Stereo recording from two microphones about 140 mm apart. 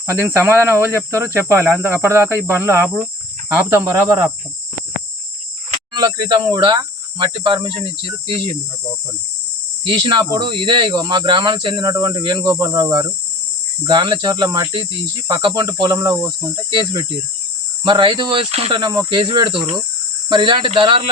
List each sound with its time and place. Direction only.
0.1 s speech: 15° right (ahead or behind)
5.9 s speech: 30° right (ahead or behind)
9.8 s speech: 35° right (ahead or behind)
18.8 s speech: 35° right (ahead or behind)